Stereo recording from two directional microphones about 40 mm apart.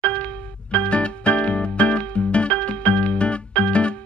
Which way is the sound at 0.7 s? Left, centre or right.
Left.